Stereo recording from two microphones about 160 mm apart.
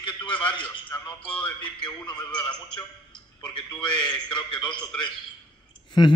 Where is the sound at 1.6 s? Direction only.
30° left (ahead or behind).